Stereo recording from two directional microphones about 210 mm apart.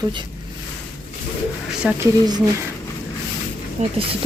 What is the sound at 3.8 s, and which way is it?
Speech, 30° right (ahead or behind).